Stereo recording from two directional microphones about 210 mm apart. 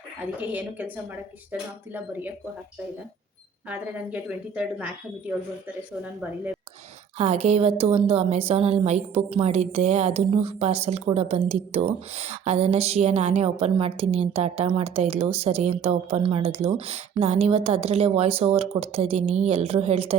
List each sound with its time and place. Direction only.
0.3 s speech: 5° right (ahead or behind)
1.9 s speech: 10° right (ahead or behind)
3.7 s speech: 5° right (ahead or behind)
7.2 s a woman's voice: 30° right (ahead or behind)